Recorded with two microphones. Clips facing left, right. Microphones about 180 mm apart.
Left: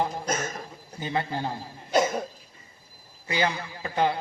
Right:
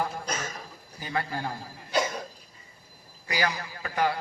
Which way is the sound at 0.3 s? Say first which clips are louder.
Left 5 dB; 45° left (ahead or behind).